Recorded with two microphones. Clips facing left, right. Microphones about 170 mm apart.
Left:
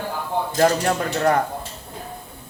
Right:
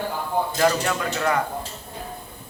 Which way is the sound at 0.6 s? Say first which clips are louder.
Left 5 dB; 40° left (ahead or behind).